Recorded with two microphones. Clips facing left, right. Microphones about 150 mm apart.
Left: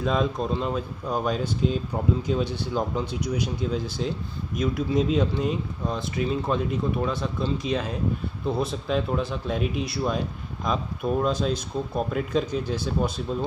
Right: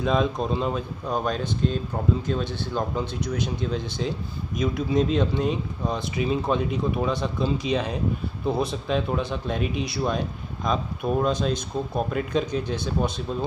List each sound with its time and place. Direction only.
0.0 s speech: centre (ahead or behind)
1.1 s speech: 5° left (ahead or behind)